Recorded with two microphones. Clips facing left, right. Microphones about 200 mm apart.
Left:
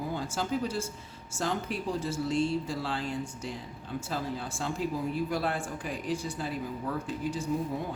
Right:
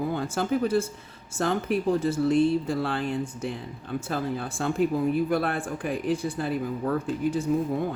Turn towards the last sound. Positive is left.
turn(degrees=-55)  # may be behind; listen again after turning